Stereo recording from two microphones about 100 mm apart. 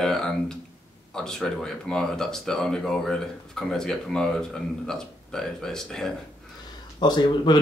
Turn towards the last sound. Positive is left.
turn(degrees=45)  # may be behind; listen again after turning